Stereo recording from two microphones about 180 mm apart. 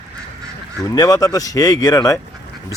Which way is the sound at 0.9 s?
20° left (ahead or behind).